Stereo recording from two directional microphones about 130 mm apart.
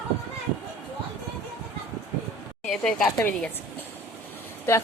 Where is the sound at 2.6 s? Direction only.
Centre (ahead or behind).